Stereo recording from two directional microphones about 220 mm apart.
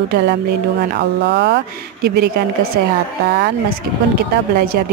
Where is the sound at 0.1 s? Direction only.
45° right (ahead or behind).